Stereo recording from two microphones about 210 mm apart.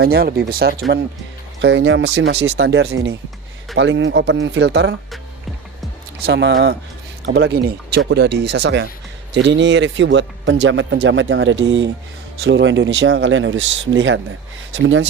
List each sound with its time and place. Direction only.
0.0 s speech: 45° right (ahead or behind)
1.6 s speech: 60° right (ahead or behind)
6.2 s speech: 50° right (ahead or behind)